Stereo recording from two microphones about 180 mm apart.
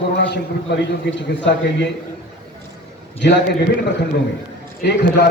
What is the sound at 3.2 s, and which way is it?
Speech, 75° left (ahead or behind).